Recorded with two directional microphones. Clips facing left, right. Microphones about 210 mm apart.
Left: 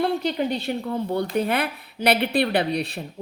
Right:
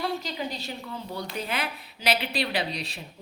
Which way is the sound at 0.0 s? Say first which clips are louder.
Left 8 dB; 55° left (ahead or behind).